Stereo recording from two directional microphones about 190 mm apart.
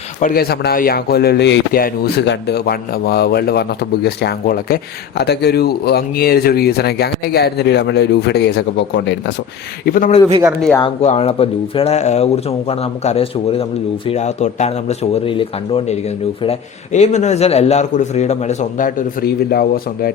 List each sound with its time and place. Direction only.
0.2 s speech: 50° left (ahead or behind); by 9.3 s 70° left (ahead or behind)
9.8 s a man's voice: 45° left (ahead or behind)
11.0 s speech: 35° left (ahead or behind); by 20.1 s 55° left (ahead or behind)